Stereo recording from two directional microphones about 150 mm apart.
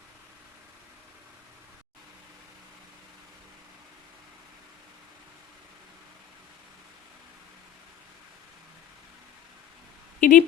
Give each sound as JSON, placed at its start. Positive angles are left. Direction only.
{"t": 10.2, "sound": "speech", "side_deg": 60}